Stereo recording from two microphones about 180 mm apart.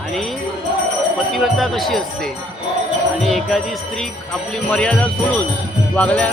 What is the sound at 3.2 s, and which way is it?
Music, centre (ahead or behind).